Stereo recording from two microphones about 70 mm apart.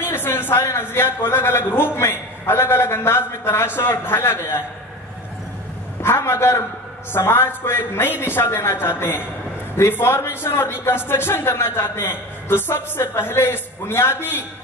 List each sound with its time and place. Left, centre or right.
0.0 s a sound: left
0.7 s a man's voice: left
6.0 s a man's voice: left